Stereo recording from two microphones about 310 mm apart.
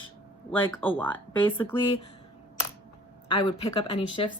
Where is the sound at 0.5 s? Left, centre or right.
Centre.